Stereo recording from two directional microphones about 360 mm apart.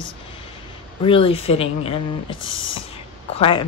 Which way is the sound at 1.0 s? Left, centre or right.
Centre.